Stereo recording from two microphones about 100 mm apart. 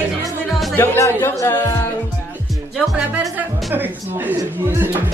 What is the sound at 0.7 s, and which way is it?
Music, 20° left (ahead or behind).